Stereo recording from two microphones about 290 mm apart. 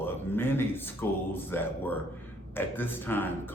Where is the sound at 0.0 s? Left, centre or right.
Centre.